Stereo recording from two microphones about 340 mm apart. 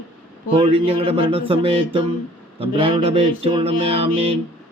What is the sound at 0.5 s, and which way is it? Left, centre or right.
Mantra, centre.